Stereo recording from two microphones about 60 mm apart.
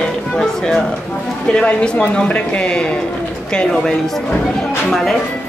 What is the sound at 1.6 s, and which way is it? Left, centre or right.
Speech, centre.